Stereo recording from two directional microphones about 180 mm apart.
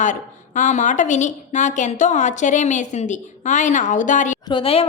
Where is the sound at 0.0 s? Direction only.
45° left (ahead or behind).